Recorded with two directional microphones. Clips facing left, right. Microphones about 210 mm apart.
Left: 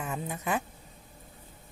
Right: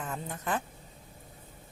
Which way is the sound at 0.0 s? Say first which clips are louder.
Left 2 dB; 10° left (ahead or behind).